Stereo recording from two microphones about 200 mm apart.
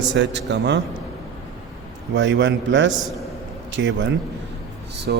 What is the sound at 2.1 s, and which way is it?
A man's voice, 65° right (ahead or behind).